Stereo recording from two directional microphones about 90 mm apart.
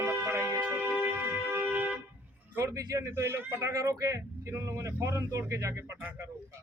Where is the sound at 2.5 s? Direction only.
35° right (ahead or behind).